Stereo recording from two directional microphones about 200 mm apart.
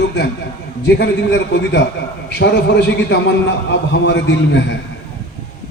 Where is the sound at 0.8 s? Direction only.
60° left (ahead or behind).